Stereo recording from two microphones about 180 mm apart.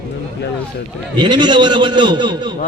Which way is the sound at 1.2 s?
25° right (ahead or behind).